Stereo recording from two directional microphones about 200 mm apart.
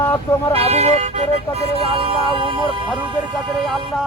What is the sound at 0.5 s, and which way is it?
Speech, 30° right (ahead or behind).